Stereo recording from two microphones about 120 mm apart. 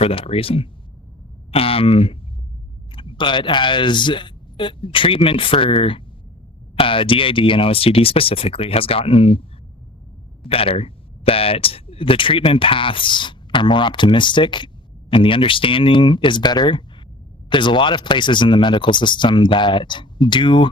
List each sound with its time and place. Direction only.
0.0 s speech: 55° left (ahead or behind)